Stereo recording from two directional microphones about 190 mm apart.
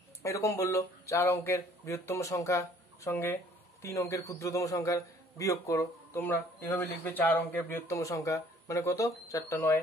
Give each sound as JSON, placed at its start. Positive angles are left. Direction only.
{"t": 0.2, "sound": "a man's voice", "side_deg": 15}